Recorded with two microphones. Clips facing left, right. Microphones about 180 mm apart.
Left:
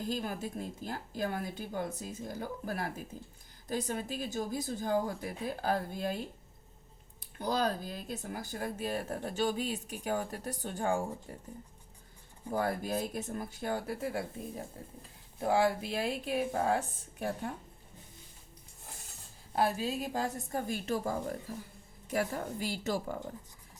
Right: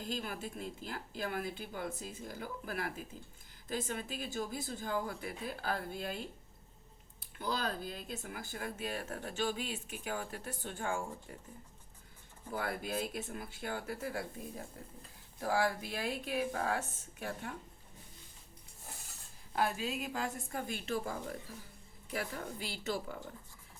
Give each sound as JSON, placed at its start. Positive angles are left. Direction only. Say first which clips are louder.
{"t": 0.1, "sound": "a woman's voice", "louder": "left 2 dB", "side_deg": 40}
{"t": 7.3, "sound": "a woman's voice", "louder": "left 5 dB", "side_deg": 40}
{"t": 12.5, "sound": "a woman's voice", "louder": "left 5 dB", "side_deg": 40}
{"t": 19.5, "sound": "a woman's voice", "louder": "left 4 dB", "side_deg": 35}